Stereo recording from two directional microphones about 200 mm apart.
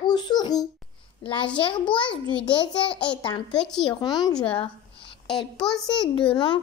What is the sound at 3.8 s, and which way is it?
Speech, 20° left (ahead or behind).